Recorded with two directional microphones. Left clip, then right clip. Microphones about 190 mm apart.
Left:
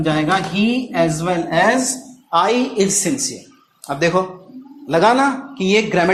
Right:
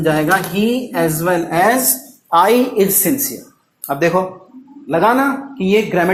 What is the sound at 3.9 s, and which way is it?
Speech, 25° right (ahead or behind).